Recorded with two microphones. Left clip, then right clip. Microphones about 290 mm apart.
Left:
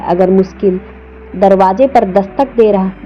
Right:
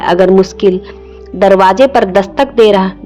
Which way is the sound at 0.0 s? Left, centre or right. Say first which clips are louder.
Right 3 dB; right.